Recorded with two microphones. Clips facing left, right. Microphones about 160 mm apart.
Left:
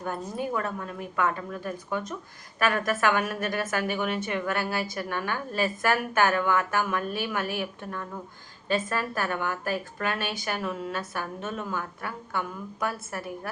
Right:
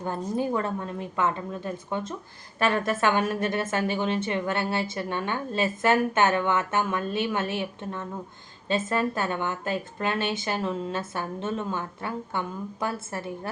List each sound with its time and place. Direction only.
0.0 s a woman's voice: 25° right (ahead or behind)